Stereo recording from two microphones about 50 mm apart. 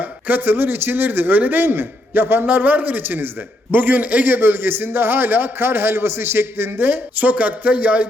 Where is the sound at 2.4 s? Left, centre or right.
Right.